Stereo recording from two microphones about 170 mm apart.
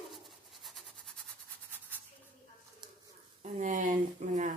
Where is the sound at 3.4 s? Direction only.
50° right (ahead or behind).